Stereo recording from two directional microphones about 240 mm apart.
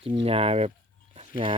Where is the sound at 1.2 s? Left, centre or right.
Right.